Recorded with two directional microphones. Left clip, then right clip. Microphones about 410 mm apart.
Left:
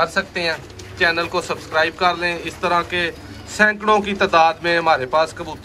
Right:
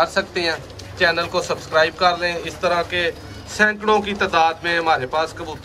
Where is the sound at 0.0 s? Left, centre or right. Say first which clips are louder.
Even; centre.